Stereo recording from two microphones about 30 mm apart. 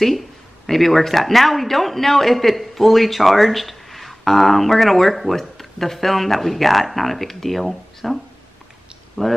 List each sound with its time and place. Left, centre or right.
0.7 s speech: centre
9.2 s speech: centre